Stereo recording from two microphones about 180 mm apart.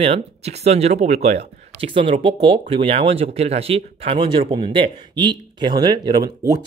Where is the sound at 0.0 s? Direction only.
35° right (ahead or behind).